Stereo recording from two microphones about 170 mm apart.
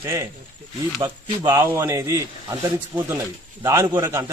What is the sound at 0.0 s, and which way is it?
A man's voice, 20° right (ahead or behind).